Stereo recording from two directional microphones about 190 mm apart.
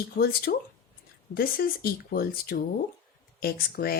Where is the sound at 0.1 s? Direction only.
55° left (ahead or behind).